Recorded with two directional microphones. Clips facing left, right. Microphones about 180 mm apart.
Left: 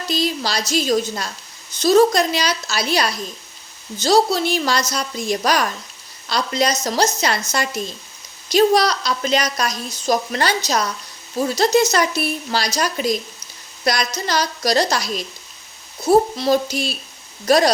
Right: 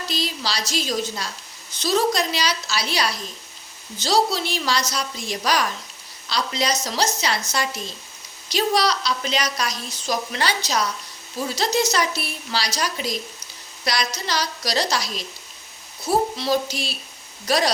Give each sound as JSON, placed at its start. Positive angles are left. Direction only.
{"t": 0.1, "sound": "a woman's voice", "side_deg": 50}